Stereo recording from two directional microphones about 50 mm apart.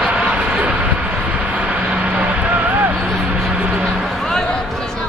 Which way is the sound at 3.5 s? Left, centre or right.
Right.